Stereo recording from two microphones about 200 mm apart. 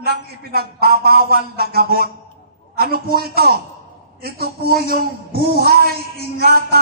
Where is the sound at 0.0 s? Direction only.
50° right (ahead or behind).